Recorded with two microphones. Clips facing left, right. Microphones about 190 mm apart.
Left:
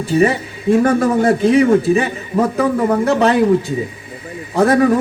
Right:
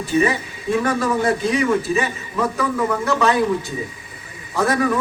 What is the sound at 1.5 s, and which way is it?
A man's voice, 35° left (ahead or behind).